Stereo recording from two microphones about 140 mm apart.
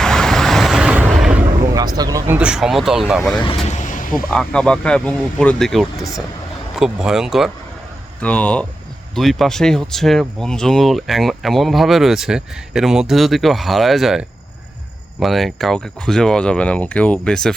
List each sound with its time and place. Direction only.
0.0 s vehicle: 5° left (ahead or behind)
1.6 s speech: 25° right (ahead or behind); by 3.3 s 5° right (ahead or behind)
3.7 s vehicle: 65° left (ahead or behind)
4.1 s speech: 5° left (ahead or behind)
8.2 s speech: 10° left (ahead or behind)